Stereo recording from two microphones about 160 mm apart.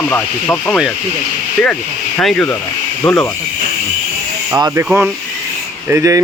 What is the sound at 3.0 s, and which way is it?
Speech, 20° left (ahead or behind).